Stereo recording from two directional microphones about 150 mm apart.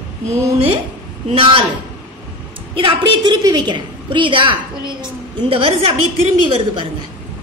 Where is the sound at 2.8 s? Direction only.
30° right (ahead or behind).